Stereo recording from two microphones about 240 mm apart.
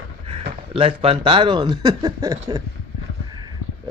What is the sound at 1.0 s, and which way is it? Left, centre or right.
Speech, right.